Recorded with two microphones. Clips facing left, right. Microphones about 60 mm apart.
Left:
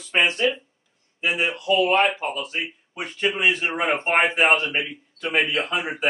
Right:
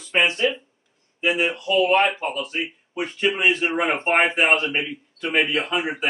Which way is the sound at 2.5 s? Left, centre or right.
Centre.